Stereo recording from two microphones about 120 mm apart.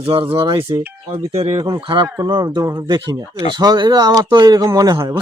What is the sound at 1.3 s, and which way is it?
Speech, 60° right (ahead or behind).